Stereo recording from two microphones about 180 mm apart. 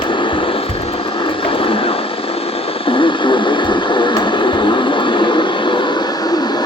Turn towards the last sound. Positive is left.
turn(degrees=25)  # may be behind; listen again after turning